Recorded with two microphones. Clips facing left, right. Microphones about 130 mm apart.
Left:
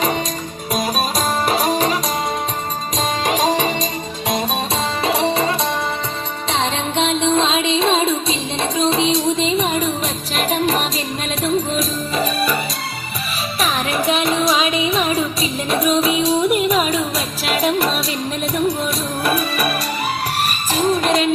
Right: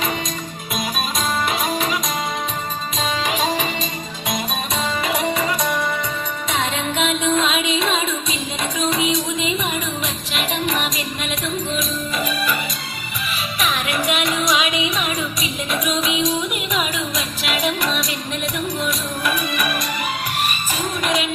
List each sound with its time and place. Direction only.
0.7 s music: 40° left (ahead or behind)
3.2 s music: 40° left (ahead or behind)
5.0 s music: 30° left (ahead or behind)
13.6 s music: 35° left (ahead or behind)
19.2 s music: 35° left (ahead or behind)